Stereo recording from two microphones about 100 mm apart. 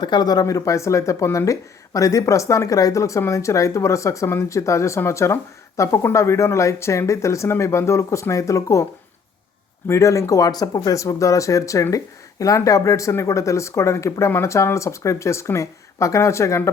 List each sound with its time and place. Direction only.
0.0 s speech: 45° left (ahead or behind); by 16.6 s 30° left (ahead or behind)